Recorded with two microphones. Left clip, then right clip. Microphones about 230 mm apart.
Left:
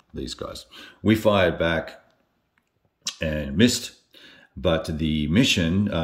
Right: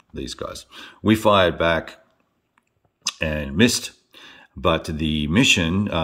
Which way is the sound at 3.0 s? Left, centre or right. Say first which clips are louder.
Right 3 dB; centre.